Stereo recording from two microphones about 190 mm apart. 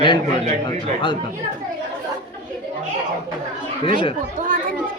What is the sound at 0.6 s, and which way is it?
Speech, 25° left (ahead or behind).